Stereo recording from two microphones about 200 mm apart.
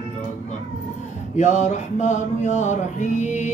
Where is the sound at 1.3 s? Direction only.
35° left (ahead or behind).